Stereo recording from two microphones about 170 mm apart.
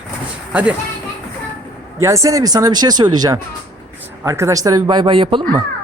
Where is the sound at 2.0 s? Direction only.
20° right (ahead or behind).